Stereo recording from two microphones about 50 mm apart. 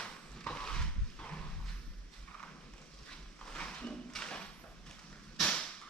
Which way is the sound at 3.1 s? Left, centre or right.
Centre.